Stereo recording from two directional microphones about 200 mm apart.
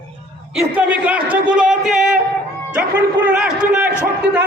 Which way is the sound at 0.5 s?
5° right (ahead or behind).